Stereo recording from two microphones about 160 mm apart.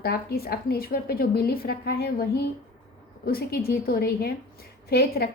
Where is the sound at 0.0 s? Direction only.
75° left (ahead or behind).